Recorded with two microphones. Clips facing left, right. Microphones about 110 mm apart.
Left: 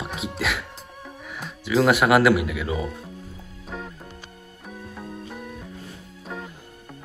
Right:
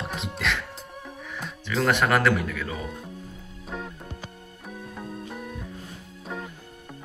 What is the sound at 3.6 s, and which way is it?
Music, centre (ahead or behind).